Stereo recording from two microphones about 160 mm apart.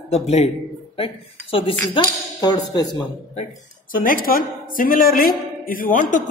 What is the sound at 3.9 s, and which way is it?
A man's voice, 60° left (ahead or behind).